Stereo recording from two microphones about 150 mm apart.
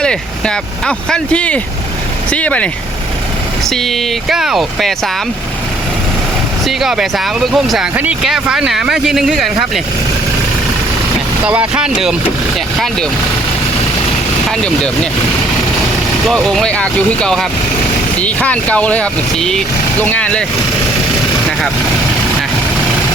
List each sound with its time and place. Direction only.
0.0 s speech: 5° left (ahead or behind)
3.7 s speech: centre (ahead or behind)
6.7 s speech: centre (ahead or behind)
11.4 s speech: 5° right (ahead or behind)
16.2 s speech: centre (ahead or behind)